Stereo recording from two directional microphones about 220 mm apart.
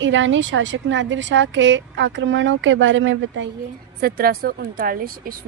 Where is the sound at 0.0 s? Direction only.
60° right (ahead or behind).